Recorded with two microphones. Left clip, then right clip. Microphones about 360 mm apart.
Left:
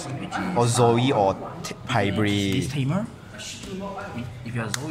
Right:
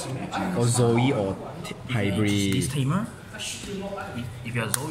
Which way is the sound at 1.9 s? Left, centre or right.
Centre.